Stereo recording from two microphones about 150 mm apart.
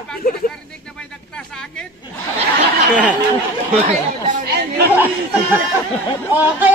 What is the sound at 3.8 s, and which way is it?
Speech, 60° right (ahead or behind).